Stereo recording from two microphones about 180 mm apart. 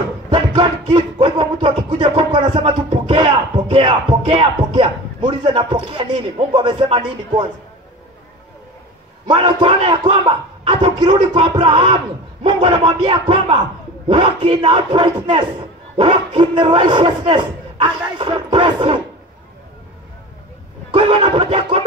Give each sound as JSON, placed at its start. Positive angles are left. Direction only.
{"t": 0.3, "sound": "speech", "side_deg": -25}
{"t": 9.3, "sound": "speech", "side_deg": -25}
{"t": 20.9, "sound": "speech", "side_deg": -30}